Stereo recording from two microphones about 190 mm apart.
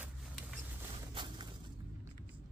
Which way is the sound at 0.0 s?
Centre (ahead or behind).